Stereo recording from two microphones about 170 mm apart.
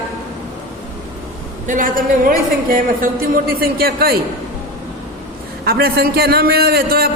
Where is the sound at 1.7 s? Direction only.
55° right (ahead or behind).